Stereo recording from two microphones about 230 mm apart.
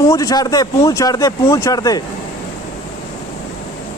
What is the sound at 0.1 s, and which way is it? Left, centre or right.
Speech, centre.